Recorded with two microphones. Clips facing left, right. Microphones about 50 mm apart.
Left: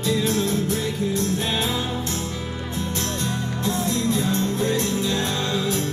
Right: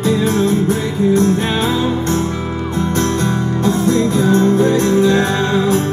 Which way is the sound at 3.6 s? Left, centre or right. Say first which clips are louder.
Right 9 dB; right.